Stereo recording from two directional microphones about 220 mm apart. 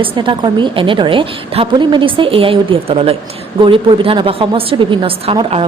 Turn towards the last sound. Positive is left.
turn(degrees=-25)  # may be behind; listen again after turning